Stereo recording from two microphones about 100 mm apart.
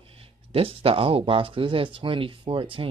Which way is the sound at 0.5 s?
70° right (ahead or behind).